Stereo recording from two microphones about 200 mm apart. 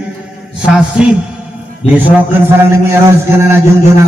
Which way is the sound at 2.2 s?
10° right (ahead or behind).